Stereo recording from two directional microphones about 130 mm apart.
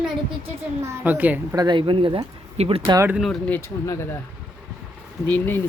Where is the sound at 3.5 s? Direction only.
15° left (ahead or behind).